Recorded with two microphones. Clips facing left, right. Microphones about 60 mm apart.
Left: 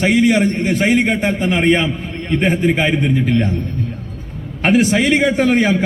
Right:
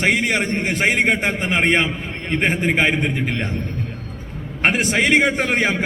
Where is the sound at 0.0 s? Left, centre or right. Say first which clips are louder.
Left 6 dB; right.